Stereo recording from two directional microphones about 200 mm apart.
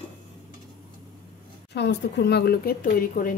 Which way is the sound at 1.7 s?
60° left (ahead or behind).